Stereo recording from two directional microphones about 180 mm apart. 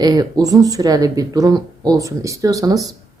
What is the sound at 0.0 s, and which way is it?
A woman's voice, 20° right (ahead or behind).